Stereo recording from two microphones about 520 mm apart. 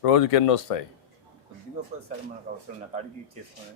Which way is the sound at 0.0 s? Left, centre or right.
Left.